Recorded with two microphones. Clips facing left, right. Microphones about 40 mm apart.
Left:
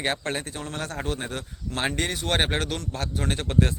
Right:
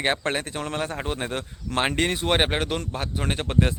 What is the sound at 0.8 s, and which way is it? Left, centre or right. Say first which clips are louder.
Speech: right 1 dB; right.